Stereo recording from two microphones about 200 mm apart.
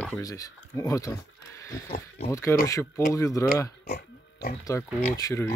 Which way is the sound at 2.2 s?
15° left (ahead or behind).